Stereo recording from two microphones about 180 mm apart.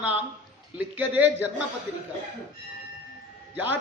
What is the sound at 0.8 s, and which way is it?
Speech, 10° right (ahead or behind).